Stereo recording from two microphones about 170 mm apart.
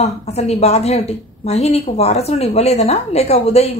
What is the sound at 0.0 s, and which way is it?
A woman's voice, 40° left (ahead or behind).